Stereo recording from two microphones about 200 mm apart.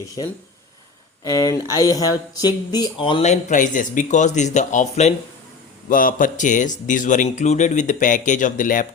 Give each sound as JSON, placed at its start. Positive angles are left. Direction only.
{"t": 1.2, "sound": "speech", "side_deg": 20}